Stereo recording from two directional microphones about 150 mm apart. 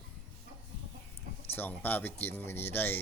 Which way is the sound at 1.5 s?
10° left (ahead or behind).